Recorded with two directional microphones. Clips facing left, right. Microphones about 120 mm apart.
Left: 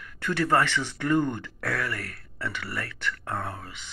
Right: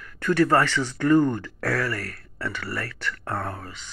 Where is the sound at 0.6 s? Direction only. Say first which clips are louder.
Right 3 dB; 20° left (ahead or behind).